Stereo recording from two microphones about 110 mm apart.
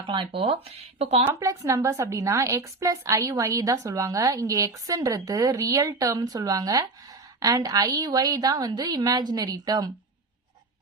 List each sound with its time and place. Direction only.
0.0 s speech: 45° right (ahead or behind)
1.3 s a woman's voice: 30° right (ahead or behind)